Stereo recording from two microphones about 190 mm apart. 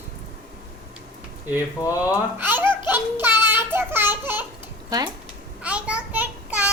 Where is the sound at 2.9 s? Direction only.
10° right (ahead or behind).